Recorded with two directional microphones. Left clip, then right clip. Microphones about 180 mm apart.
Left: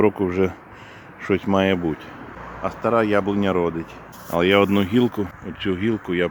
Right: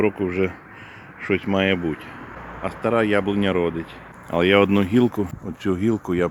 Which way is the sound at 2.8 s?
Centre (ahead or behind).